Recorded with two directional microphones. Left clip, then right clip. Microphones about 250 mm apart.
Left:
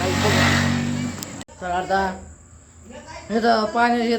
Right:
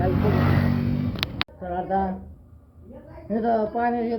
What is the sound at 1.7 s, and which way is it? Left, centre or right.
Speech, centre.